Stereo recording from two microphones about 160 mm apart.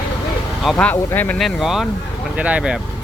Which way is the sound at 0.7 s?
10° left (ahead or behind).